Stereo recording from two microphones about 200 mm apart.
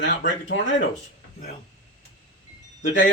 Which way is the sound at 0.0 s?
65° left (ahead or behind).